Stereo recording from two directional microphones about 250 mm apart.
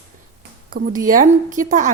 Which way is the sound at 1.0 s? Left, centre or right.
Right.